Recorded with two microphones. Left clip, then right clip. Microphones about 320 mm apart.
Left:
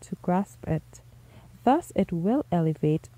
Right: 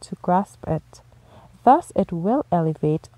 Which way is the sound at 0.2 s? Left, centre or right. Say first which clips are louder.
Right 8 dB; centre.